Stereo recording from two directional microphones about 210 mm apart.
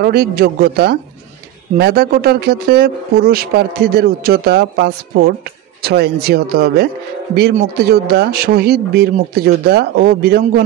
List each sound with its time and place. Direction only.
0.0 s speech: 50° right (ahead or behind)